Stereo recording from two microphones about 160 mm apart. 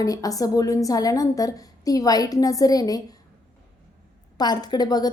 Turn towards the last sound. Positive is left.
turn(degrees=25)  # may be behind; listen again after turning